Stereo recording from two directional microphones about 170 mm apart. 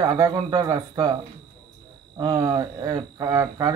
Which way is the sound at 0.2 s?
20° right (ahead or behind).